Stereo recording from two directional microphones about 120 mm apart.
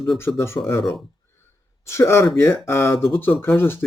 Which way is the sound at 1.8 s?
20° left (ahead or behind).